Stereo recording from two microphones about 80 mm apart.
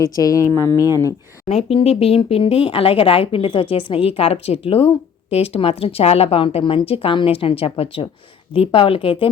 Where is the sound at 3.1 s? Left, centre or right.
Left.